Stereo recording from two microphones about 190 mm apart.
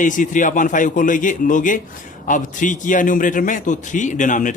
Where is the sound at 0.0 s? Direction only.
45° left (ahead or behind).